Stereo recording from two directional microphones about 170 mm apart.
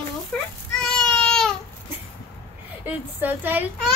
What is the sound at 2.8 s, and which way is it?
Speech, 10° right (ahead or behind).